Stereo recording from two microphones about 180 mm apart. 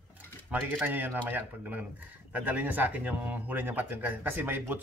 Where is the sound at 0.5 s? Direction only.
10° right (ahead or behind).